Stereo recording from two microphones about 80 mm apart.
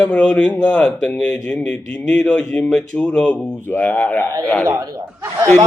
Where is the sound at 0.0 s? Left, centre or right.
Centre.